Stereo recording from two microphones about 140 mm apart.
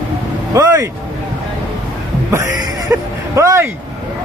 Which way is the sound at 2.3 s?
20° right (ahead or behind).